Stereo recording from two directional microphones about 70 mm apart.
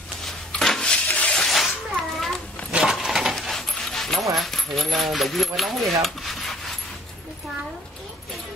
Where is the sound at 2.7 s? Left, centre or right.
Centre.